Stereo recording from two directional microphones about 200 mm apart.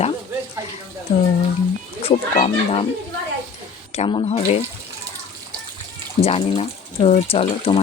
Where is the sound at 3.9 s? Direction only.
25° left (ahead or behind).